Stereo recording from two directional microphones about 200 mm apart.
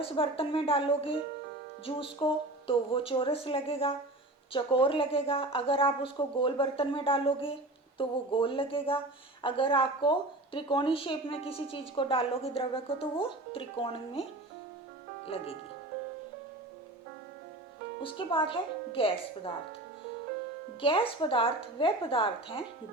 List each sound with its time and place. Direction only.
0.0 s a woman's voice: 25° left (ahead or behind)
18.0 s a woman's voice: 25° left (ahead or behind)
20.8 s a woman's voice: 25° left (ahead or behind)